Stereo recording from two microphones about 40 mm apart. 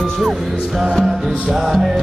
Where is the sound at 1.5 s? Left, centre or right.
Centre.